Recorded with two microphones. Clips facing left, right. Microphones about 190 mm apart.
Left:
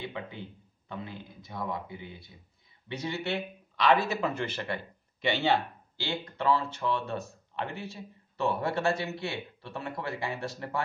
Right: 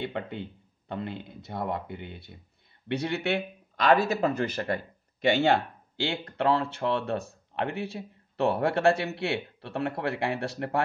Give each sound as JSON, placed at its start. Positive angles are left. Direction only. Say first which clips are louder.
{"t": 0.0, "sound": "speech", "louder": "right 5 dB", "side_deg": -65}
{"t": 6.3, "sound": "speech", "louder": "right 2 dB", "side_deg": -65}